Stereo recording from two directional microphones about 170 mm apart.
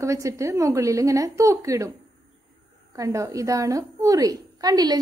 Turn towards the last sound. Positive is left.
turn(degrees=-25)  # may be behind; listen again after turning